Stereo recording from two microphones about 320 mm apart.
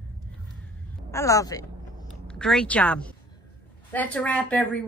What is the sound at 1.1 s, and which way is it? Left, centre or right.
A woman's voice, centre.